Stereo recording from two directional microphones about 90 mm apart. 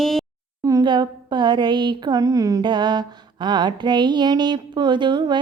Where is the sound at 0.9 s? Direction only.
55° right (ahead or behind).